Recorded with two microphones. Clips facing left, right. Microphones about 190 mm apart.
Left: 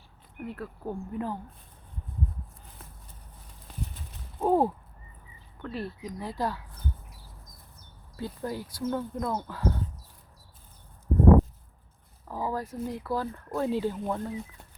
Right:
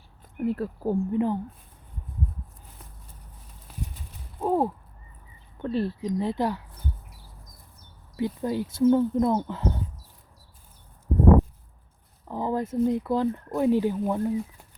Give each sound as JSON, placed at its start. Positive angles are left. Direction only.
{"t": 0.4, "sound": "speech", "side_deg": -30}
{"t": 3.7, "sound": "clip-clop", "side_deg": -5}
{"t": 4.4, "sound": "a sound", "side_deg": 0}
{"t": 5.6, "sound": "speech", "side_deg": -30}
{"t": 8.1, "sound": "speech", "side_deg": -20}
{"t": 12.3, "sound": "speech", "side_deg": -20}